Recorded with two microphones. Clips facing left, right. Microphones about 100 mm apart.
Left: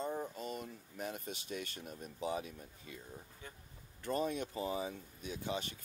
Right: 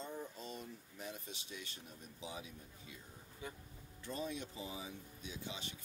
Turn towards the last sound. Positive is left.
turn(degrees=55)  # may be behind; listen again after turning